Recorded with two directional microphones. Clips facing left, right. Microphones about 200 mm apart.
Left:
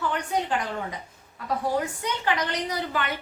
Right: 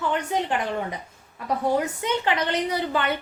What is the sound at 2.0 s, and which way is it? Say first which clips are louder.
Speech: right 3 dB; 25° right (ahead or behind).